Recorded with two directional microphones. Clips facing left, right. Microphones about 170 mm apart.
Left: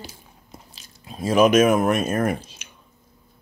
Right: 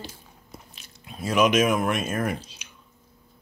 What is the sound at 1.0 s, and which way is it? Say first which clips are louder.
Speech: left 4 dB; 40° left (ahead or behind).